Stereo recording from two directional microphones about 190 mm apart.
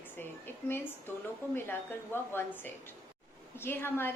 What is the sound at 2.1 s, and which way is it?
Speech, 10° left (ahead or behind).